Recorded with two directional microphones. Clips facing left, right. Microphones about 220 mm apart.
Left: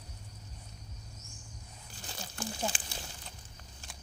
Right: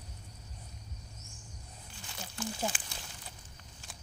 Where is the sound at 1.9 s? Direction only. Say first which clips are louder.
Even; 35° left (ahead or behind).